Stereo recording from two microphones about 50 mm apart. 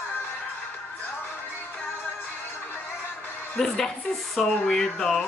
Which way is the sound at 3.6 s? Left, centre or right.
Centre.